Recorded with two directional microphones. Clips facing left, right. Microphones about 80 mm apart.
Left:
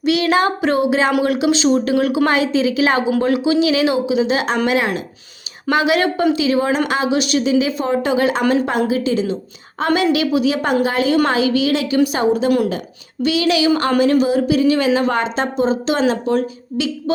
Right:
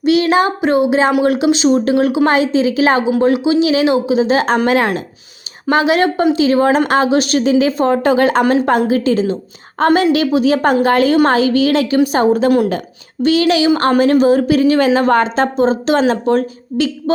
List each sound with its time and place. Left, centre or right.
0.0 s a sound: right
0.9 s a woman's voice: right
5.6 s a woman's voice: right